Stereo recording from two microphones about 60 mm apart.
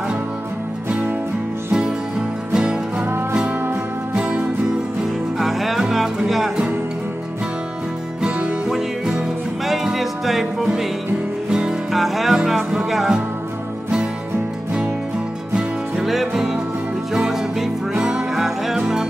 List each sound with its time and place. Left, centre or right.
0.8 s music: right
4.1 s music: centre
5.4 s music: centre
8.6 s music: centre
11.9 s music: centre
15.5 s music: centre